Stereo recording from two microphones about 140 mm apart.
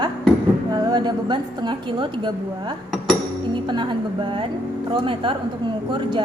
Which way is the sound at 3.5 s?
35° right (ahead or behind).